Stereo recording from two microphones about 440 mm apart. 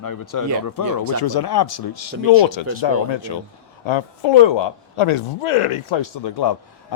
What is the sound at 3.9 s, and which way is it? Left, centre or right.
A man's voice, left.